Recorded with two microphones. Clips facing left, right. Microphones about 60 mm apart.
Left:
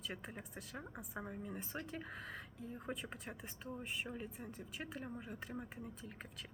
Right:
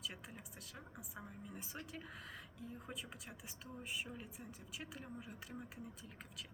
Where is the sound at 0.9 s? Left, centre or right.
Left.